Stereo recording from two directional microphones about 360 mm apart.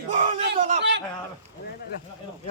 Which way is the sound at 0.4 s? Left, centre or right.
Right.